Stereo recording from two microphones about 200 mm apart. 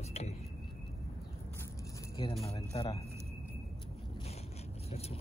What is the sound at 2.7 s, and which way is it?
Speech, 25° left (ahead or behind).